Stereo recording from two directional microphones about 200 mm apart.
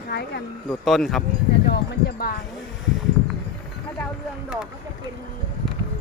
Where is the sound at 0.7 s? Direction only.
Centre (ahead or behind).